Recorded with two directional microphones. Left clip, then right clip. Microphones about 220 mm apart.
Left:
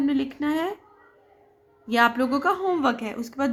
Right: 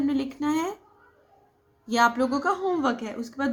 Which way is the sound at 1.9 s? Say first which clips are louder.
Left 1 dB; 40° left (ahead or behind).